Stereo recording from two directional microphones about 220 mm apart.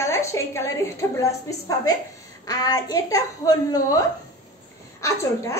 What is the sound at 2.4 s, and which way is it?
A woman's voice, 15° left (ahead or behind).